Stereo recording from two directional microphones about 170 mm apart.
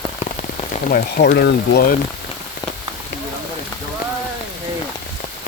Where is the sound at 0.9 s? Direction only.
55° left (ahead or behind).